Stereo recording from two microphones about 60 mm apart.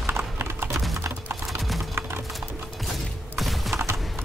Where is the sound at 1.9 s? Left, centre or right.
Right.